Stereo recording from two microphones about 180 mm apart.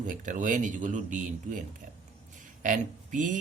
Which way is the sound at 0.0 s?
45° right (ahead or behind).